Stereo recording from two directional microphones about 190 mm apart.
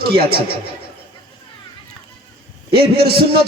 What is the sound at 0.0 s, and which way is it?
Speech, 55° right (ahead or behind).